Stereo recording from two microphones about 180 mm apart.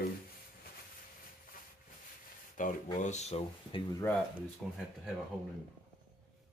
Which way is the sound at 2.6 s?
45° left (ahead or behind).